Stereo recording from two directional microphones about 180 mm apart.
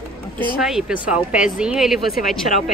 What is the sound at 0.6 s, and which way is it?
Speech, centre (ahead or behind).